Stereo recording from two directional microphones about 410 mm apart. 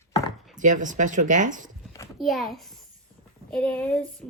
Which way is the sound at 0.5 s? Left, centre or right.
Centre.